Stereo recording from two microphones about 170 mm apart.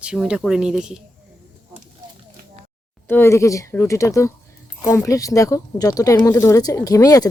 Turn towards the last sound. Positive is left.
turn(degrees=20)  # may be behind; listen again after turning